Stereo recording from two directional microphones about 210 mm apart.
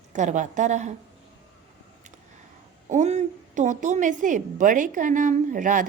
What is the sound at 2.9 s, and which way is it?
A woman's voice, 35° right (ahead or behind).